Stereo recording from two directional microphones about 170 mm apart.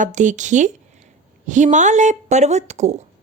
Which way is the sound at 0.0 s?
45° right (ahead or behind).